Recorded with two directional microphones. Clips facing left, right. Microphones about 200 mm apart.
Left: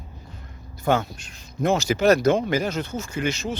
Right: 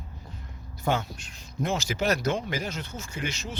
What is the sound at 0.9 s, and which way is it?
Speech, 55° left (ahead or behind).